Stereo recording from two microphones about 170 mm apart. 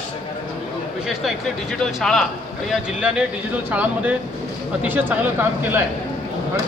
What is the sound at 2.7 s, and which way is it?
Speech, 5° right (ahead or behind).